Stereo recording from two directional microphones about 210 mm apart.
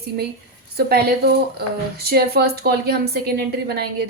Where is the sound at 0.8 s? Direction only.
50° right (ahead or behind).